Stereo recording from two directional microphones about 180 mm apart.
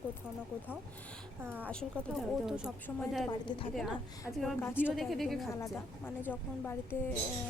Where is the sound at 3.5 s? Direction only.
25° left (ahead or behind).